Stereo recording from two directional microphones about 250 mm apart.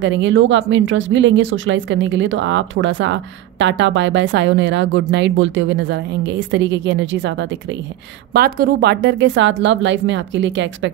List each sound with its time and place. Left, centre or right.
0.0 s speech: right